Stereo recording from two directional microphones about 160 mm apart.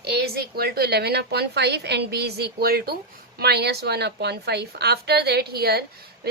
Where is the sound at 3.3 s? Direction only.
85° right.